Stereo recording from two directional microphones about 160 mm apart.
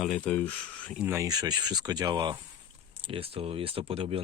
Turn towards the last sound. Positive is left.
turn(degrees=-35)  # may be behind; listen again after turning